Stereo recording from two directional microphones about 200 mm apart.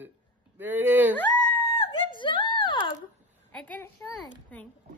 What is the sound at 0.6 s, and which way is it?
Speech, 10° right (ahead or behind).